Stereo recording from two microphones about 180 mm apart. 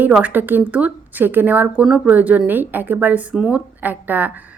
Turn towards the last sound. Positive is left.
turn(degrees=-10)  # may be behind; listen again after turning